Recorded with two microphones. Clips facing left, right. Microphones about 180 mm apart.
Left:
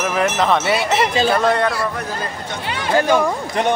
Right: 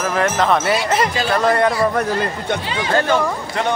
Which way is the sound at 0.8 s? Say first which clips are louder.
Left 2 dB; 25° left (ahead or behind).